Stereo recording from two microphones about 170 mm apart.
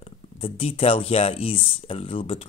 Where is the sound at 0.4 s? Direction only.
35° left (ahead or behind).